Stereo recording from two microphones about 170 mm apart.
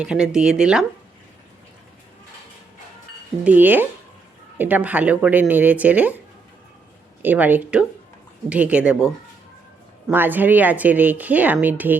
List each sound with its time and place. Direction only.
0.0 s a woman's voice: 5° right (ahead or behind)
3.4 s speech: 10° right (ahead or behind)
7.2 s speech: 10° right (ahead or behind)